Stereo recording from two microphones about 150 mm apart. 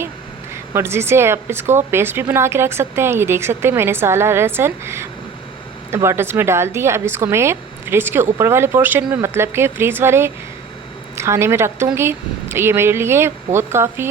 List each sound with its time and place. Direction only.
0.5 s a woman's voice: 15° right (ahead or behind)